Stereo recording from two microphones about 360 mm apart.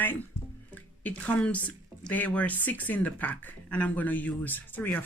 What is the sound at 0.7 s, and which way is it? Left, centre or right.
Speech, centre.